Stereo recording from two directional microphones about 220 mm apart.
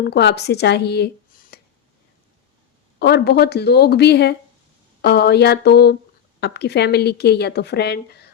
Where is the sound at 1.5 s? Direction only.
45° left (ahead or behind).